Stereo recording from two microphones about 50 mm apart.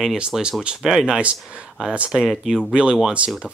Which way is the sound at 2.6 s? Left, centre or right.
Right.